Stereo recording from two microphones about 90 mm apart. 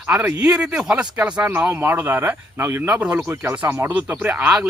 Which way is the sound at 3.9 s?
20° right (ahead or behind).